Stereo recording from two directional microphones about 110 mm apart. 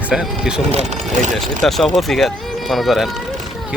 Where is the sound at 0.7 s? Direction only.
90° right.